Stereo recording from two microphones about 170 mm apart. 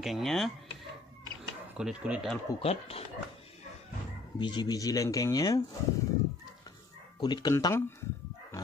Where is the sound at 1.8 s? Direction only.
5° right (ahead or behind).